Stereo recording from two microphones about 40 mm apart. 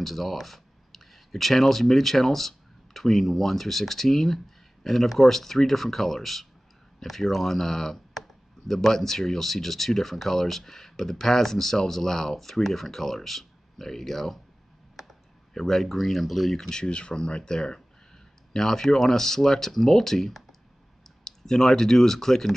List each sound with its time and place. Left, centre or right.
0.0 s speech: centre
16.6 s speech: left